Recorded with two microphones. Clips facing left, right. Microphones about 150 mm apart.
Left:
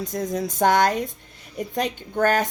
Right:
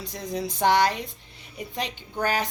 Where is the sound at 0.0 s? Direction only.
45° left (ahead or behind).